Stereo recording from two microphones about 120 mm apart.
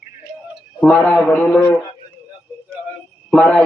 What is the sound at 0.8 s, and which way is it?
Speech, 10° left (ahead or behind).